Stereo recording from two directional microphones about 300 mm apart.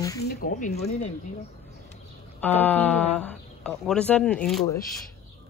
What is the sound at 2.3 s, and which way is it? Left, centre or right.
Speech, centre.